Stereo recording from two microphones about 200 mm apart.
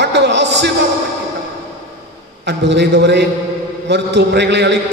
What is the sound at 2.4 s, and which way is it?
A man's voice, 60° right (ahead or behind).